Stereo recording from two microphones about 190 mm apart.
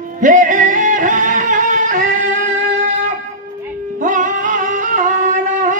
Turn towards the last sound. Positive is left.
turn(degrees=-40)  # may be behind; listen again after turning